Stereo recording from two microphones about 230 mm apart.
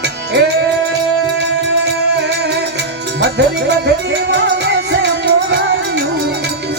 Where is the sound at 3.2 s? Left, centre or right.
Right.